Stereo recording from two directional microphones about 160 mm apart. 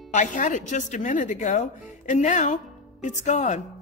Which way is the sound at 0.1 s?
50° left (ahead or behind).